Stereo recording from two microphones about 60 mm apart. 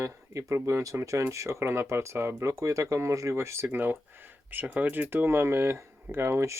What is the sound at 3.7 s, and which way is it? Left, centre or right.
Speech, right.